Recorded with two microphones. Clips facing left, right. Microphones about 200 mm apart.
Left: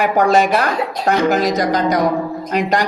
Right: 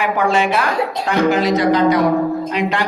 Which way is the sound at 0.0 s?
40° left (ahead or behind).